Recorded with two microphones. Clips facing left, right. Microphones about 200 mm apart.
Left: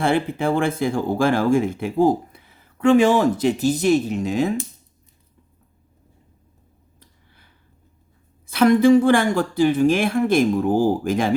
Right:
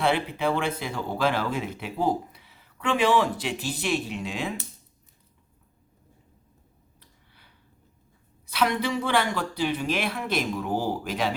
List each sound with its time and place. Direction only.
0.0 s speech: 45° left (ahead or behind)
8.4 s speech: 50° left (ahead or behind)